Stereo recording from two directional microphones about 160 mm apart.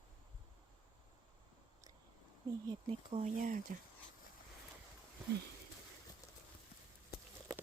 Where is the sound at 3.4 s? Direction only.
50° right (ahead or behind).